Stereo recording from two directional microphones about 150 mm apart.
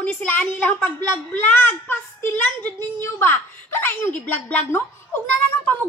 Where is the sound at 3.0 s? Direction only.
15° left (ahead or behind).